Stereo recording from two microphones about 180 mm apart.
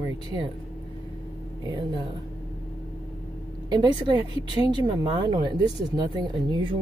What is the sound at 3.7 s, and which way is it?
A woman's voice, 25° right (ahead or behind).